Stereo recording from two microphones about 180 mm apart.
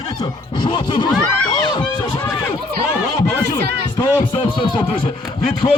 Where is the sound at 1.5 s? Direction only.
25° left (ahead or behind).